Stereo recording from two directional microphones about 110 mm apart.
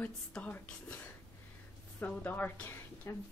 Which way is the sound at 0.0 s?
15° left (ahead or behind).